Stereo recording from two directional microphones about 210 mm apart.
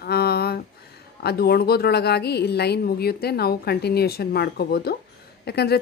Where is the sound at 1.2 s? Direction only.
50° left (ahead or behind).